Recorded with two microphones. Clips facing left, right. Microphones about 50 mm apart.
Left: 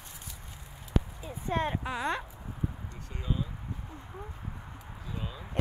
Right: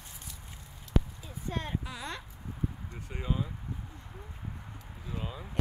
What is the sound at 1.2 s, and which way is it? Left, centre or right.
Speech, left.